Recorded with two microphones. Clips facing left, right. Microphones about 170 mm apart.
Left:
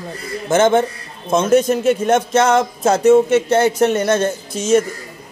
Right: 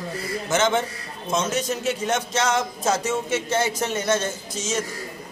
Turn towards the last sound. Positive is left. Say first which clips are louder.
# left 12 dB
turn(degrees=60)  # may be behind; listen again after turning